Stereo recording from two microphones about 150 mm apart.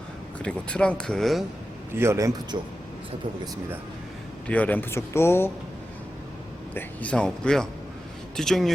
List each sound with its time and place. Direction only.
0.4 s speech: 5° left (ahead or behind)
2.0 s a man's voice: 20° right (ahead or behind)
4.4 s speech: 10° left (ahead or behind)
6.7 s speech: 10° left (ahead or behind)